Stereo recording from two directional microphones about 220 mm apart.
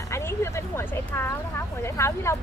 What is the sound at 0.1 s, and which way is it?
Speech, 10° left (ahead or behind).